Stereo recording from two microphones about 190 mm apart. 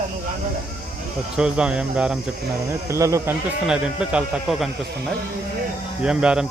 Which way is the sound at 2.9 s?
15° right (ahead or behind).